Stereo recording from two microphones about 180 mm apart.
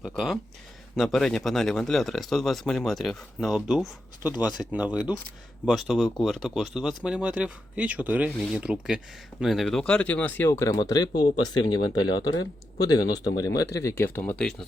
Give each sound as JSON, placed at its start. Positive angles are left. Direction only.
{"t": 0.0, "sound": "speech", "side_deg": 0}